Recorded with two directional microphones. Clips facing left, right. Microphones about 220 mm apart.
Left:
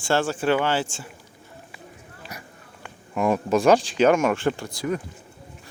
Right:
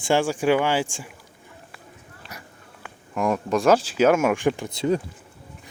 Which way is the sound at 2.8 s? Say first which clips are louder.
Left 1 dB; centre (ahead or behind).